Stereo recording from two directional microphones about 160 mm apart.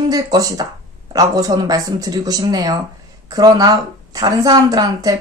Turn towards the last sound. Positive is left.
turn(degrees=-25)  # may be behind; listen again after turning